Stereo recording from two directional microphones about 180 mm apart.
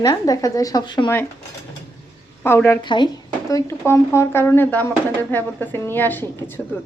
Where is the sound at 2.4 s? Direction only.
15° left (ahead or behind).